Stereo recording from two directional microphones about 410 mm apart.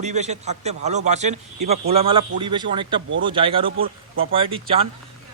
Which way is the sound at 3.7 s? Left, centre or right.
Right.